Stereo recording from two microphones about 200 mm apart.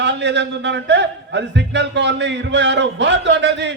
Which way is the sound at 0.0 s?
60° right (ahead or behind).